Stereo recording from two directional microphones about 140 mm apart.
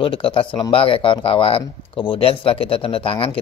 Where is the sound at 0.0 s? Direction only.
40° left (ahead or behind).